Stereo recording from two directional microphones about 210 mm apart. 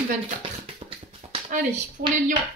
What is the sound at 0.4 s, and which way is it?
Tap, 25° right (ahead or behind).